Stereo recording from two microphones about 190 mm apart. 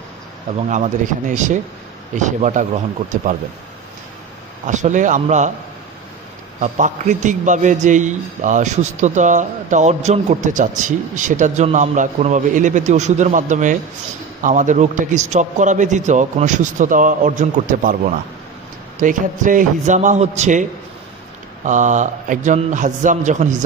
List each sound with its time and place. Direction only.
1.3 s a man's voice: 40° right (ahead or behind)
4.6 s a man's voice: 40° right (ahead or behind)
6.6 s a man's voice: 40° right (ahead or behind)
18.9 s a man's voice: 45° right (ahead or behind)
21.6 s a man's voice: 40° right (ahead or behind)